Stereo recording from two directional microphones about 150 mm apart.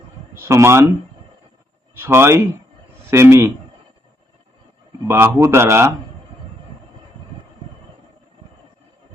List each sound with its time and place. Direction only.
0.3 s speech: 15° right (ahead or behind)
2.0 s speech: 15° right (ahead or behind)
5.0 s speech: 15° right (ahead or behind)